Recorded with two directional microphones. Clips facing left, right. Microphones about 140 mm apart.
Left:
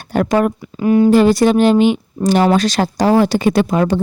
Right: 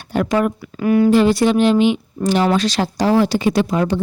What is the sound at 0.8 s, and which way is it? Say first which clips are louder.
Speech: left 2 dB; 25° left (ahead or behind).